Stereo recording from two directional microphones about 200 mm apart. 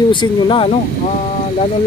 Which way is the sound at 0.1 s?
25° left (ahead or behind).